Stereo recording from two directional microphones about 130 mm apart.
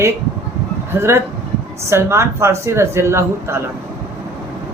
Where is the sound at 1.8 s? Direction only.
20° right (ahead or behind).